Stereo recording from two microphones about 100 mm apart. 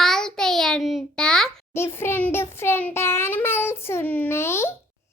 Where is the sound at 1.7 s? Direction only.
25° left (ahead or behind).